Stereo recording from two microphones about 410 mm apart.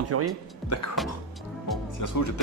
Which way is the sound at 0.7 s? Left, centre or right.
Left.